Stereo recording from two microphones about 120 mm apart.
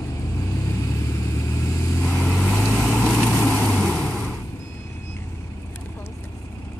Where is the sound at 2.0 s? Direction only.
10° left (ahead or behind).